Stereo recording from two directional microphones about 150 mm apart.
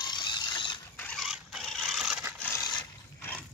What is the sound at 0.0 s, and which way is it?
Mechanisms, 30° left (ahead or behind).